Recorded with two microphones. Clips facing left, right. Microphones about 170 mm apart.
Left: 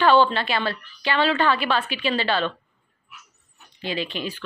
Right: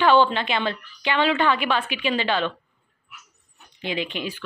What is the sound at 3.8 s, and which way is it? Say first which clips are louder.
Speech: even; 15° right (ahead or behind).